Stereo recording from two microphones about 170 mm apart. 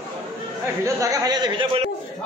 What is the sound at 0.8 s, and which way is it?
A man's voice, 20° right (ahead or behind).